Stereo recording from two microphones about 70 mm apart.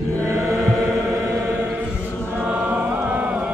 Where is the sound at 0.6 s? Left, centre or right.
Right.